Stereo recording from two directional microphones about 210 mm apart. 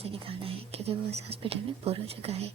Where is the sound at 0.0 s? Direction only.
25° right (ahead or behind).